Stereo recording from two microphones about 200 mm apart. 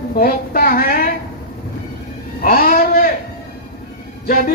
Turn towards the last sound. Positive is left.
turn(degrees=45)  # may be behind; listen again after turning